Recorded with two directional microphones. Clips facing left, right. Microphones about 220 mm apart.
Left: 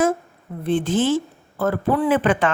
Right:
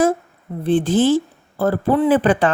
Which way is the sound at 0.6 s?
35° right (ahead or behind).